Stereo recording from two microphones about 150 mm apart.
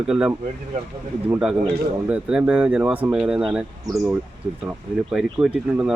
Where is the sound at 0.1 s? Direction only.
10° right (ahead or behind).